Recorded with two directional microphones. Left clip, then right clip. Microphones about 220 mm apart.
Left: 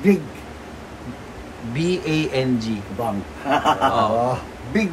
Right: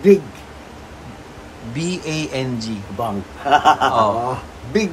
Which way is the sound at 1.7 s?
10° right (ahead or behind).